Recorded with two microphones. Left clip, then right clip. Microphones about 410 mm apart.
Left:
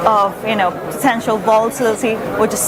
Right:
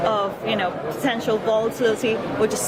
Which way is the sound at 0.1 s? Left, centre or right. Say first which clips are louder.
Left 8 dB; left.